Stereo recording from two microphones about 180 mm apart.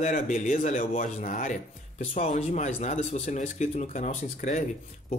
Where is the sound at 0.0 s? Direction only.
45° left (ahead or behind).